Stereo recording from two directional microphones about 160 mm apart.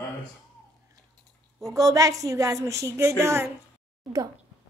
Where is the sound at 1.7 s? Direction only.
20° right (ahead or behind).